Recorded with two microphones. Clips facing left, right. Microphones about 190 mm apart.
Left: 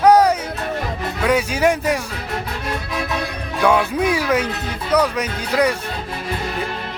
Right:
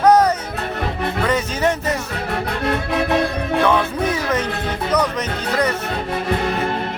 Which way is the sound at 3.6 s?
10° left (ahead or behind).